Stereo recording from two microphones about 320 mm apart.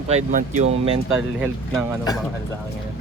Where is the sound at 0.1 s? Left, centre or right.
Right.